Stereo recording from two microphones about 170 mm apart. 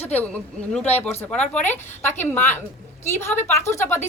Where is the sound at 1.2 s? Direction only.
5° left (ahead or behind).